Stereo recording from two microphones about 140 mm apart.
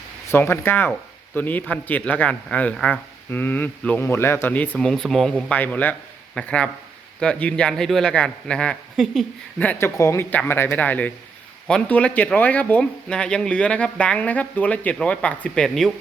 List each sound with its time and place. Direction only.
0.3 s speech: 15° left (ahead or behind)
9.6 s speech: 20° left (ahead or behind); by 15.9 s centre (ahead or behind)